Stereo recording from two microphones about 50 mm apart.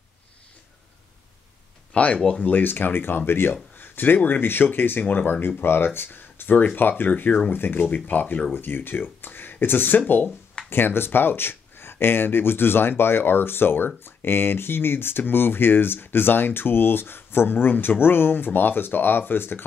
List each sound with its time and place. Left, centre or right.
1.9 s speech: left
6.5 s speech: left
8.5 s speech: left
10.7 s speech: left